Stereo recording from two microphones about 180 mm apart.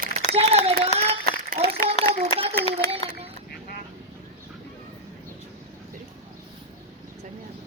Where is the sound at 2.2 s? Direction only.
35° right (ahead or behind).